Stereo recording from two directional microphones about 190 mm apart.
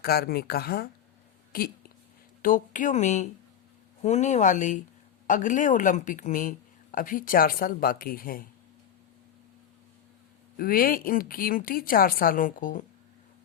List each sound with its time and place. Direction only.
0.0 s speech: 55° left (ahead or behind)
2.4 s speech: 45° left (ahead or behind)
10.6 s speech: 50° left (ahead or behind)